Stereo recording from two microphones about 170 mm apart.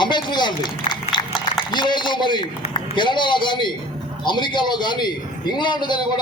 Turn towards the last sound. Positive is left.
turn(degrees=25)  # may be behind; listen again after turning